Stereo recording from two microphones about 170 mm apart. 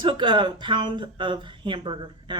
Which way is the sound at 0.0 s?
25° right (ahead or behind).